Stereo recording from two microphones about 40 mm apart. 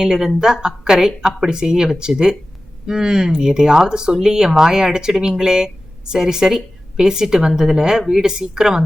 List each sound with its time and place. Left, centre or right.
0.0 s speech: centre